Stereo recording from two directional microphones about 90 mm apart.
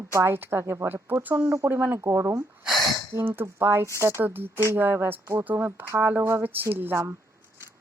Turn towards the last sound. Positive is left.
turn(degrees=-25)  # may be behind; listen again after turning